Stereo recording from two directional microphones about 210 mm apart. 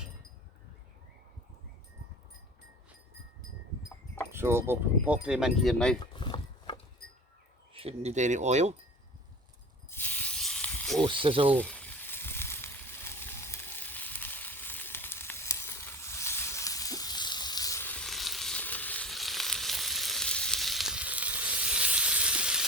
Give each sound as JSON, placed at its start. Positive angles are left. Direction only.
{"t": 4.3, "sound": "speech", "side_deg": -10}
{"t": 6.1, "sound": "a sound", "side_deg": 25}
{"t": 7.7, "sound": "speech", "side_deg": -30}
{"t": 9.9, "sound": "snake", "side_deg": 10}
{"t": 11.0, "sound": "speech", "side_deg": -25}
{"t": 11.5, "sound": "a sound", "side_deg": 5}